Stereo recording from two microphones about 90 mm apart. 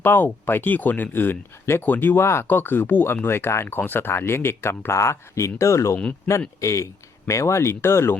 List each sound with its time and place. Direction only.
0.0 s a man's voice: 25° left (ahead or behind)